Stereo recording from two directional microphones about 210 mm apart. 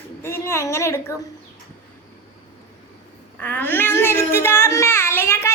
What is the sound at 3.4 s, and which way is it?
A child's voice, 10° left (ahead or behind).